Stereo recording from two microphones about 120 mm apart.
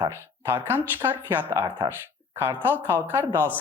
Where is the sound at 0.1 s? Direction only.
20° right (ahead or behind).